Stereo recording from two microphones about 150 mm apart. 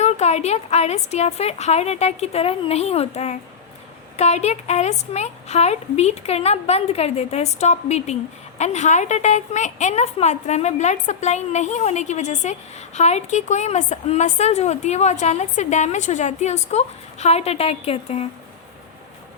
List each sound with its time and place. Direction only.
0.0 s a woman's voice: 45° left (ahead or behind)